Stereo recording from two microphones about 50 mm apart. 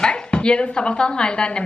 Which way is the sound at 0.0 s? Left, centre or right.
Centre.